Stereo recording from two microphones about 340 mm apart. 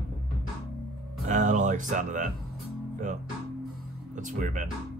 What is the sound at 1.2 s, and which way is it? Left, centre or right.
Music, right.